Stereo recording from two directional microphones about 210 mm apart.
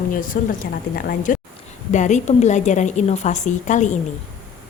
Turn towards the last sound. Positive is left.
turn(degrees=35)  # may be behind; listen again after turning